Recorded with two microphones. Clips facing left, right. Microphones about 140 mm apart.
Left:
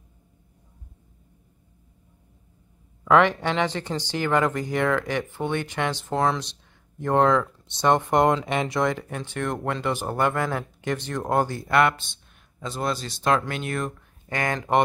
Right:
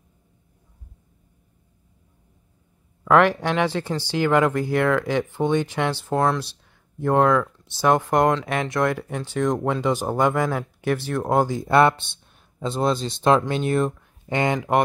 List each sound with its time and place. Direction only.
3.1 s speech: 10° right (ahead or behind)
6.0 s speech: centre (ahead or behind)
11.6 s speech: 30° right (ahead or behind)